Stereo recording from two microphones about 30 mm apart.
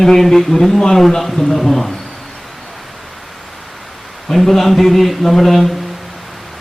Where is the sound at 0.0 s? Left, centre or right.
Centre.